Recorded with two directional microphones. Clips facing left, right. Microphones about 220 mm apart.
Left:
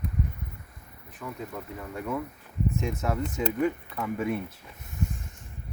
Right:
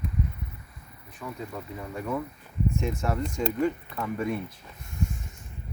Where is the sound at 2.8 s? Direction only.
5° left (ahead or behind).